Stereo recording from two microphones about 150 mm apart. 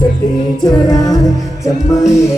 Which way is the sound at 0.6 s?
25° left (ahead or behind).